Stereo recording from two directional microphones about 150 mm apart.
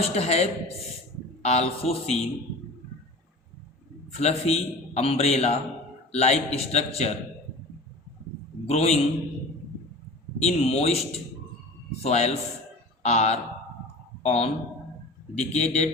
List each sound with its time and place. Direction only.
0.0 s a man's voice: 45° left (ahead or behind)
4.1 s a man's voice: 45° left (ahead or behind)
8.6 s a man's voice: 45° left (ahead or behind)
10.4 s a man's voice: 45° left (ahead or behind)